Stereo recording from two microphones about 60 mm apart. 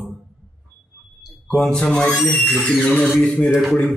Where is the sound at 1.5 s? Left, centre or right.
Centre.